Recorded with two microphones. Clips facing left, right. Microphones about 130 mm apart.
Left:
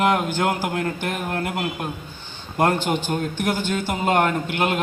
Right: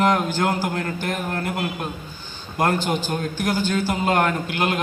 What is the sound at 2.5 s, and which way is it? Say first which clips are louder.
A man's voice: left 1 dB; 25° left (ahead or behind).